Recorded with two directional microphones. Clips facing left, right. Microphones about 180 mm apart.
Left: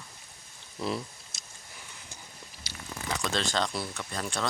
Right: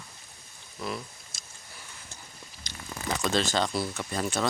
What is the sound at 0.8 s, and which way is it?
Speech, 30° left (ahead or behind).